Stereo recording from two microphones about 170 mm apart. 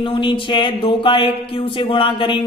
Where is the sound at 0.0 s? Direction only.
30° left (ahead or behind).